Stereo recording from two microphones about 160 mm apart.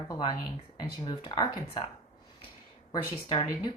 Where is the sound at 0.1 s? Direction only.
25° left (ahead or behind).